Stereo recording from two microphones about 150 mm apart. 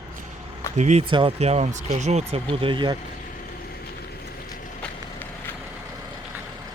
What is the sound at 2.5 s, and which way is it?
Speech, 35° right (ahead or behind).